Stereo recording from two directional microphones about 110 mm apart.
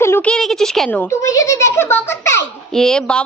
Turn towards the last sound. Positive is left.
turn(degrees=5)  # may be behind; listen again after turning